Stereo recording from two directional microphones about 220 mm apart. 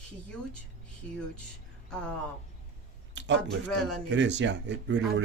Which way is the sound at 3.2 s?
55° right (ahead or behind).